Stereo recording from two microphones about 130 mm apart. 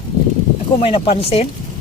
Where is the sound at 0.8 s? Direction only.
50° left (ahead or behind).